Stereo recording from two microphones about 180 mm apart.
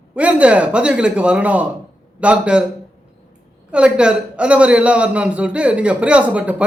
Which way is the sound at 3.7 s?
5° right (ahead or behind).